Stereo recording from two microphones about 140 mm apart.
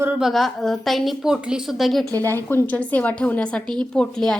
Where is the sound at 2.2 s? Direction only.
15° left (ahead or behind).